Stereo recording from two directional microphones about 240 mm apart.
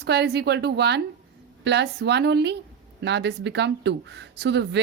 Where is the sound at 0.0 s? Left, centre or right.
Right.